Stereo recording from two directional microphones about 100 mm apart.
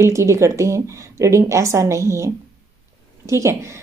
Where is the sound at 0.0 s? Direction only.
30° right (ahead or behind).